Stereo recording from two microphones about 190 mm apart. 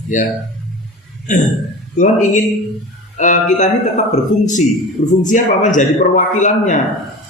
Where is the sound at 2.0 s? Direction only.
40° left (ahead or behind).